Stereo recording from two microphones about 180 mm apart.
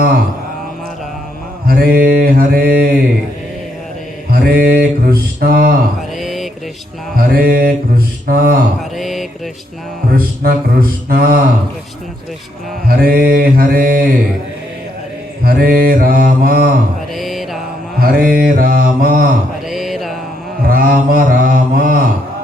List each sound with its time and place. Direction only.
1.6 s mantra: 55° right (ahead or behind)
4.3 s a sound: 55° right (ahead or behind)
6.1 s mantra: centre (ahead or behind)
7.2 s speech: 55° right (ahead or behind)
8.8 s mantra: centre (ahead or behind)
10.1 s mantra: 55° right (ahead or behind)
12.9 s mantra: 55° right (ahead or behind)
15.4 s mantra: 55° right (ahead or behind)
17.2 s mantra: centre (ahead or behind)
18.0 s mantra: 55° right (ahead or behind)
19.6 s mantra: centre (ahead or behind)
20.7 s mantra: 55° right (ahead or behind)